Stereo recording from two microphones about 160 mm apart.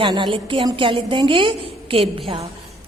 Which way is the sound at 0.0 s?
30° right (ahead or behind).